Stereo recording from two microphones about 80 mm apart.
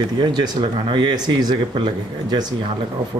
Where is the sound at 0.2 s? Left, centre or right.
Right.